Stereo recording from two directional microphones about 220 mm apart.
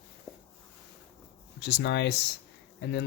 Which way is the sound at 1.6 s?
50° left (ahead or behind).